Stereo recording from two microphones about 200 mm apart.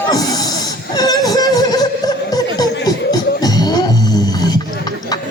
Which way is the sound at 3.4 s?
20° left (ahead or behind).